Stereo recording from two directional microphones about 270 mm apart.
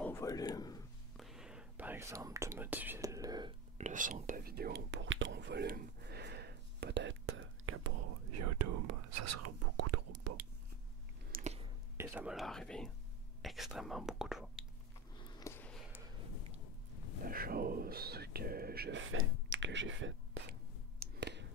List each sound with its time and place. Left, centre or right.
0.0 s a man's voice: centre
1.1 s whispering: centre; by 7.9 s right
8.3 s whispering: right
11.3 s a sound: right
12.0 s speech: centre
15.2 s sniff: centre
17.3 s whispering: right
21.0 s a sound: right